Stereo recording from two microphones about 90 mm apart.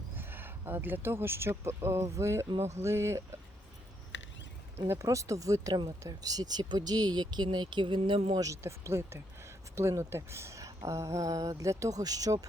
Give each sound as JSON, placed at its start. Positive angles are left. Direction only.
{"t": 0.2, "sound": "speech", "side_deg": -25}
{"t": 4.9, "sound": "speech", "side_deg": -35}
{"t": 8.4, "sound": "speech", "side_deg": -35}